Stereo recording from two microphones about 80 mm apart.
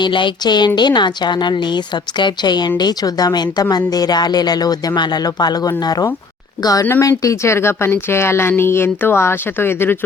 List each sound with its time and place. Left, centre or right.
0.0 s a woman's voice: left
7.0 s a woman's voice: left